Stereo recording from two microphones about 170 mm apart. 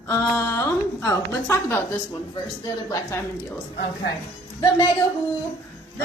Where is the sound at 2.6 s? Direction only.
20° left (ahead or behind).